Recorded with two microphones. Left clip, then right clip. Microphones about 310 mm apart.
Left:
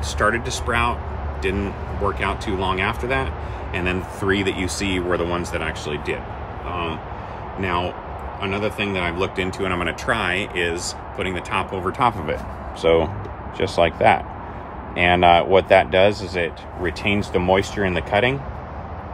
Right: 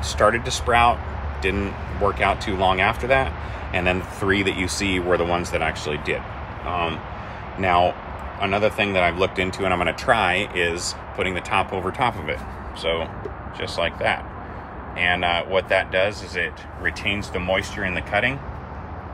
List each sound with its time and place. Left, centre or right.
0.2 s speech: centre
8.4 s speech: centre
12.8 s speech: left